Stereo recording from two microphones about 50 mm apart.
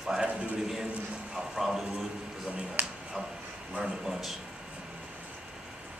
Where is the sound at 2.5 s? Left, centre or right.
Right.